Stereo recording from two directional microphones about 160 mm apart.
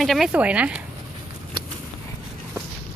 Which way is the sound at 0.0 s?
Centre (ahead or behind).